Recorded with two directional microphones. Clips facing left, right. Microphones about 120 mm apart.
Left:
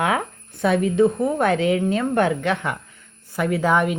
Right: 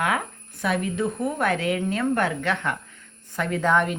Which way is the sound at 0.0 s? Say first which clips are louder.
Left 3 dB; 25° left (ahead or behind).